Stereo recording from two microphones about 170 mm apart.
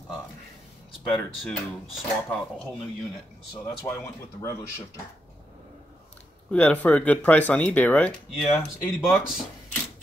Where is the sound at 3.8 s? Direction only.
15° left (ahead or behind).